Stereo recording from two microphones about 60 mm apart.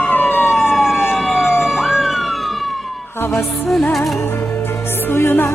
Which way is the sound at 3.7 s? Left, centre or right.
Centre.